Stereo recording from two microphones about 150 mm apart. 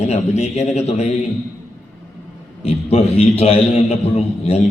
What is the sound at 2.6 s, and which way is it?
A man's voice, 45° left (ahead or behind).